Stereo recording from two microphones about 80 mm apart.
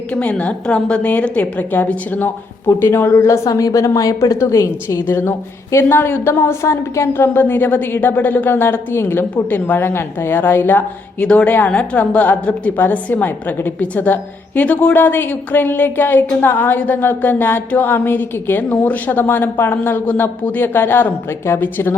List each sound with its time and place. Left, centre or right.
0.1 s a woman's voice: centre; by 5.0 s left
5.0 s a woman's voice: left